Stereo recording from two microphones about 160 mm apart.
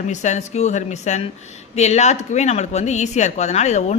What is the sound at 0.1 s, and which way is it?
Speech, 50° left (ahead or behind).